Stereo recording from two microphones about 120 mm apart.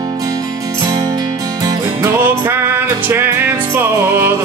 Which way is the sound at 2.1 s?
20° right (ahead or behind).